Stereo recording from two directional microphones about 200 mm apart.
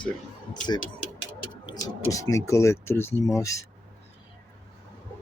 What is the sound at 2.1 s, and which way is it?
Speech, 15° left (ahead or behind).